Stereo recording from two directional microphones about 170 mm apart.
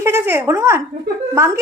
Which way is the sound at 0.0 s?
15° right (ahead or behind).